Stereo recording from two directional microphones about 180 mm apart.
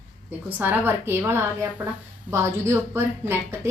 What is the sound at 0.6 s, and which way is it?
A woman's voice, 10° right (ahead or behind).